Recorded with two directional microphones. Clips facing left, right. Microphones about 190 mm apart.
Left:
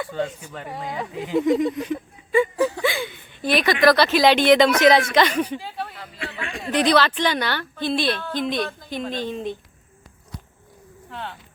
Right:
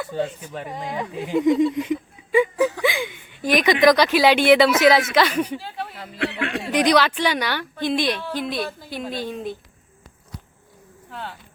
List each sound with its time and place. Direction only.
0.1 s a woman's voice: 10° right (ahead or behind)
1.7 s a sound: 20° right (ahead or behind)
2.8 s a woman's voice: 15° right (ahead or behind)
5.5 s speech: 10° left (ahead or behind)
6.1 s a sound: 70° right (ahead or behind)
6.6 s a woman's voice: 10° right (ahead or behind)
11.1 s speech: centre (ahead or behind)